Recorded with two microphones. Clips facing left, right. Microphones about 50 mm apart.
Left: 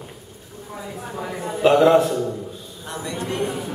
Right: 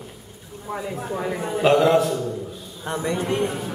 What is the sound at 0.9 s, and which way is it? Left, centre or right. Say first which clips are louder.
Speech: right 3 dB; right.